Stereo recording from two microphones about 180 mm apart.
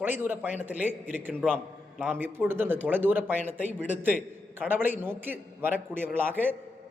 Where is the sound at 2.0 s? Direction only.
10° right (ahead or behind).